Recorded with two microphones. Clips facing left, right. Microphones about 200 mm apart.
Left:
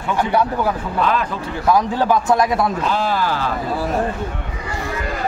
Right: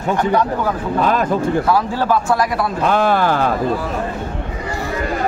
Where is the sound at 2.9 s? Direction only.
55° right (ahead or behind).